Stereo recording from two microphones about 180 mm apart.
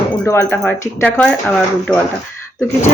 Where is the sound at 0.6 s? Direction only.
5° left (ahead or behind).